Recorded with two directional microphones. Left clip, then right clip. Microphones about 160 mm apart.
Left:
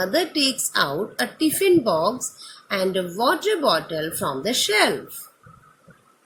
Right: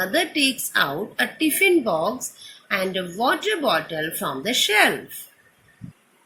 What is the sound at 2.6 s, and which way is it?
A woman's voice, 45° left (ahead or behind).